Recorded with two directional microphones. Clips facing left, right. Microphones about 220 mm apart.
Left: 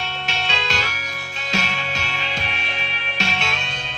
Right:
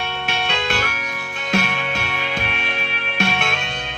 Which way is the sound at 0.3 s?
55° right (ahead or behind).